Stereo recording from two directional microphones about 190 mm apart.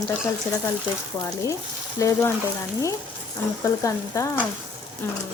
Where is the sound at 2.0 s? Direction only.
15° left (ahead or behind).